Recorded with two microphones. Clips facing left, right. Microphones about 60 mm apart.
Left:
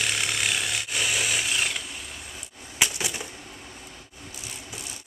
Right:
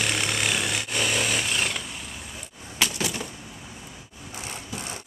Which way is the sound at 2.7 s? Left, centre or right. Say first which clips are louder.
Right 1 dB; centre.